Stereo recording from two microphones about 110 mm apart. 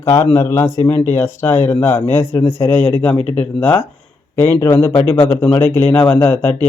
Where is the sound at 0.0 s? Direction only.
25° left (ahead or behind).